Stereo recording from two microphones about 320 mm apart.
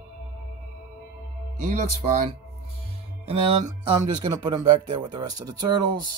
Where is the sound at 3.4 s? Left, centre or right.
Centre.